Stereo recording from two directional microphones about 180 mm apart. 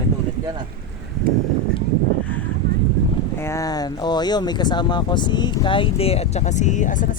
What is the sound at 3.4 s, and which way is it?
Speech, 20° left (ahead or behind).